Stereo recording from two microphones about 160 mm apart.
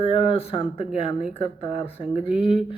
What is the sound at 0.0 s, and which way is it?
Speech, 40° left (ahead or behind).